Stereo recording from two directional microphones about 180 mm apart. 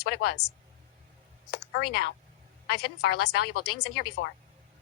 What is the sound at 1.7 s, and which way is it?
Speech, 65° left (ahead or behind).